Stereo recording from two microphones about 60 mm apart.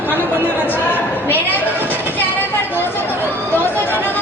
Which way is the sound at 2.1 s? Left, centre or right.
Left.